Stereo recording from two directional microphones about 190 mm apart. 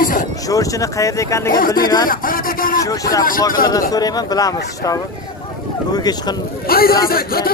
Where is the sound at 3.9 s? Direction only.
20° left (ahead or behind).